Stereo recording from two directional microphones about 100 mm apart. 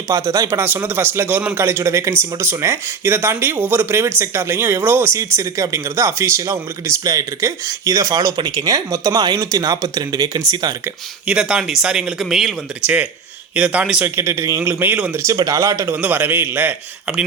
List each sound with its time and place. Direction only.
0.1 s a man's voice: 30° right (ahead or behind)
11.3 s speech: 10° right (ahead or behind)
12.8 s speech: 15° right (ahead or behind)
14.0 s a man's voice: 25° right (ahead or behind)
15.1 s speech: 30° right (ahead or behind)
16.0 s a man's voice: 20° right (ahead or behind)
17.1 s speech: 10° right (ahead or behind)